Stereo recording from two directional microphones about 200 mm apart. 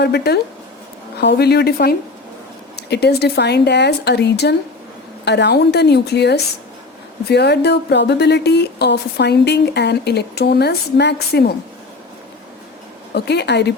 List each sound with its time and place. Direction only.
0.0 s a woman's voice: 55° left (ahead or behind)
13.1 s speech: 55° left (ahead or behind)